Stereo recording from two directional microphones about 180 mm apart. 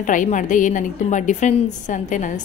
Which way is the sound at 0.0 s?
45° left (ahead or behind).